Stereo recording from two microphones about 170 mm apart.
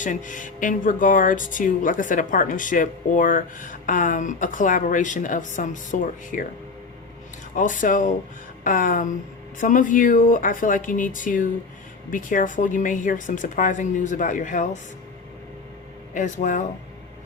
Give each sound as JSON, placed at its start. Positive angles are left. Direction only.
{"t": 0.0, "sound": "speech", "side_deg": 50}
{"t": 7.5, "sound": "speech", "side_deg": 50}
{"t": 16.1, "sound": "speech", "side_deg": 50}